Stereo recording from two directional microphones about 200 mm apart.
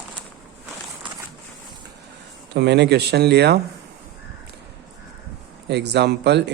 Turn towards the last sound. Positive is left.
turn(degrees=-60)  # may be behind; listen again after turning